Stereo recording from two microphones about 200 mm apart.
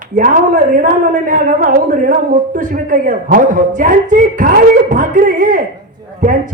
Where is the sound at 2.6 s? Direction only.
40° right (ahead or behind).